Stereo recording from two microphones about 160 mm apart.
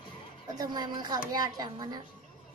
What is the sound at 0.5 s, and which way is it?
A child's voice, 25° right (ahead or behind).